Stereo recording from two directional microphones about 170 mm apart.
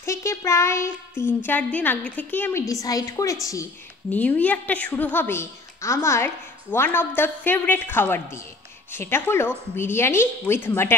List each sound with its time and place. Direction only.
0.0 s a woman's voice: 15° left (ahead or behind)